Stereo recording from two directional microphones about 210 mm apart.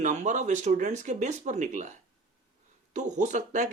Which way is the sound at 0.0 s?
35° right (ahead or behind).